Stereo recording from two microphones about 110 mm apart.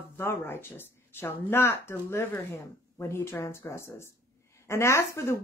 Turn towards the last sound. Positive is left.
turn(degrees=25)  # may be behind; listen again after turning